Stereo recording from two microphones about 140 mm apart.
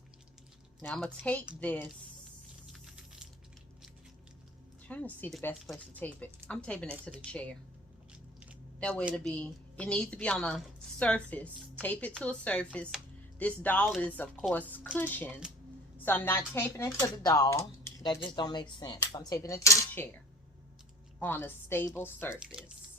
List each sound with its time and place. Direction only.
0.8 s a woman's voice: 5° left (ahead or behind)
2.7 s typing: 5° right (ahead or behind)
4.9 s a woman's voice: 10° left (ahead or behind)
5.5 s speech: centre (ahead or behind)
5.9 s a woman's voice: 10° left (ahead or behind)
8.1 s biting: 10° right (ahead or behind)
8.8 s a woman's voice: 10° left (ahead or behind)
18.1 s speech: 35° left (ahead or behind); by 20.1 s 15° left (ahead or behind)
21.2 s a woman's voice: 15° left (ahead or behind)